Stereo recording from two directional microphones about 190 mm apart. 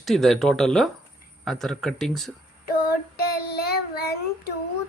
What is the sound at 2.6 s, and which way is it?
Female singing, 50° left (ahead or behind).